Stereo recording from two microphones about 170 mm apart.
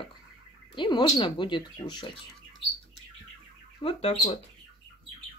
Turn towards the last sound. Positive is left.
turn(degrees=35)  # may be behind; listen again after turning